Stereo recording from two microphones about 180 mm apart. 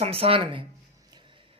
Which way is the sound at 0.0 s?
30° right (ahead or behind).